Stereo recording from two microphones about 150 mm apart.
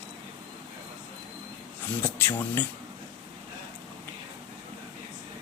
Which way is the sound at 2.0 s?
15° left (ahead or behind).